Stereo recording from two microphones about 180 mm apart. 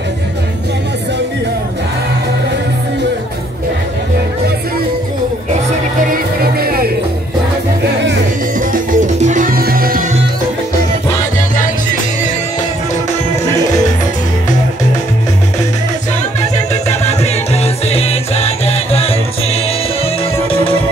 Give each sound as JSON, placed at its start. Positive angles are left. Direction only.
{"t": 6.0, "sound": "music", "side_deg": -55}
{"t": 8.5, "sound": "music", "side_deg": -45}
{"t": 16.2, "sound": "music", "side_deg": 40}